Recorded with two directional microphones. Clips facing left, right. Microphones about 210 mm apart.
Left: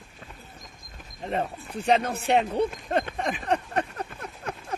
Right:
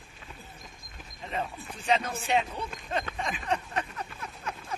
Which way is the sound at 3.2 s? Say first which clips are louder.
Left 5 dB; 60° left (ahead or behind).